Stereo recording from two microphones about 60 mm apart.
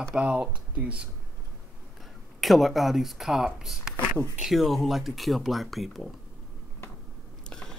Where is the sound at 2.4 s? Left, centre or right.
Centre.